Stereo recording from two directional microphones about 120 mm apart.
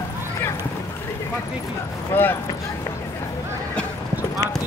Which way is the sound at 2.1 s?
15° left (ahead or behind).